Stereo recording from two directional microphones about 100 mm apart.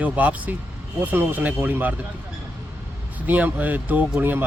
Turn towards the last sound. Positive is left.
turn(degrees=-20)  # may be behind; listen again after turning